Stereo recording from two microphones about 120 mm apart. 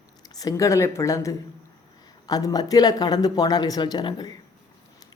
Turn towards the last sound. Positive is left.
turn(degrees=35)  # may be behind; listen again after turning